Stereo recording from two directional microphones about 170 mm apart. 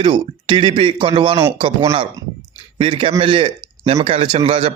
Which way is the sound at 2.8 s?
30° right (ahead or behind).